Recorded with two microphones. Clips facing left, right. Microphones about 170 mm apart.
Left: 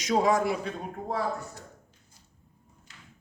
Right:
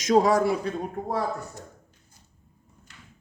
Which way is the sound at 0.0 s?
40° right (ahead or behind).